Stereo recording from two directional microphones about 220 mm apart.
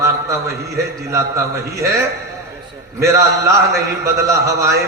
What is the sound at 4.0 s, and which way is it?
Speech, 15° right (ahead or behind).